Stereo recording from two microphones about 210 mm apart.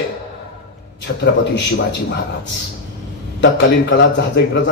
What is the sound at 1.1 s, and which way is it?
Speech, 55° left (ahead or behind).